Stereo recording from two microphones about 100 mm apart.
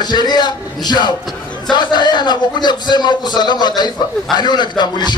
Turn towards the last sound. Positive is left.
turn(degrees=50)  # may be behind; listen again after turning